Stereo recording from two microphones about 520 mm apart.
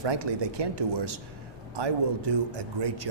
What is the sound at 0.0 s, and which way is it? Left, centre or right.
A man's voice, right.